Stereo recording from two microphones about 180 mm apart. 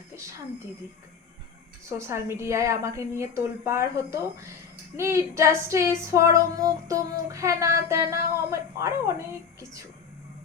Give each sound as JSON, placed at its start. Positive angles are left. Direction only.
{"t": 1.9, "sound": "female singing", "side_deg": -15}